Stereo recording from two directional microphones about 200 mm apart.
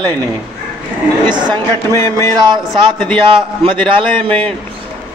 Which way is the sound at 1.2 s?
20° right (ahead or behind).